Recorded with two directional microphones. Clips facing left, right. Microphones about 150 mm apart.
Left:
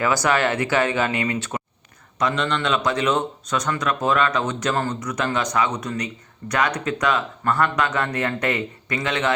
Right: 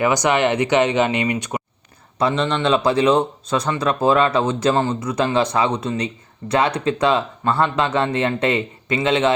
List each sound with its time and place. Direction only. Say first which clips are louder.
0.0 s speech: right 3 dB; 20° right (ahead or behind)
2.1 s speech: right 3 dB; 30° right (ahead or behind)